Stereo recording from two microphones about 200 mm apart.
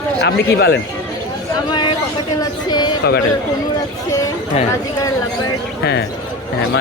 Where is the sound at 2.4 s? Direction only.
20° left (ahead or behind).